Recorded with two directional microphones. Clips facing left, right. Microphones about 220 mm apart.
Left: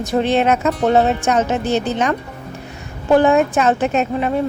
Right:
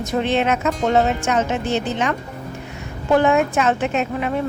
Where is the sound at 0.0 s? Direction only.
35° left (ahead or behind).